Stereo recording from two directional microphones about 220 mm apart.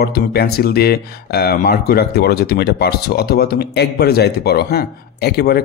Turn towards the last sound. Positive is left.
turn(degrees=45)  # may be behind; listen again after turning